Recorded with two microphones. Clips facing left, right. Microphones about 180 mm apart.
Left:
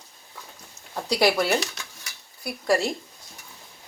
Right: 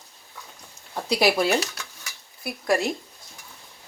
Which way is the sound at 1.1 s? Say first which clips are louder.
Even; 15° right (ahead or behind).